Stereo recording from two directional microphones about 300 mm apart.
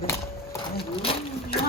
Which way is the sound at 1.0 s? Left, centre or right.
Centre.